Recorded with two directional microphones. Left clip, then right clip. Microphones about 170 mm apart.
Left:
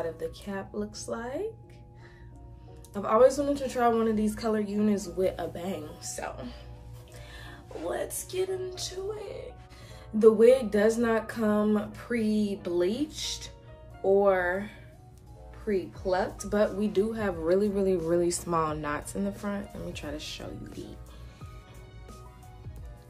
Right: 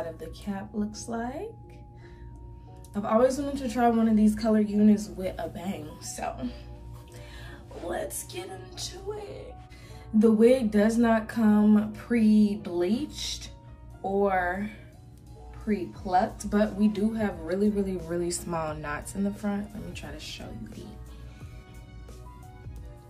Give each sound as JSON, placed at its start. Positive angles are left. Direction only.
{"t": 0.3, "sound": "speech", "side_deg": 5}
{"t": 2.9, "sound": "a woman's voice", "side_deg": 10}
{"t": 7.9, "sound": "a woman's voice", "side_deg": 10}
{"t": 17.1, "sound": "speech", "side_deg": 30}
{"t": 18.1, "sound": "a woman's voice", "side_deg": 15}